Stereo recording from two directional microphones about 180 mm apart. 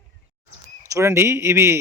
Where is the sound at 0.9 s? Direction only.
15° right (ahead or behind).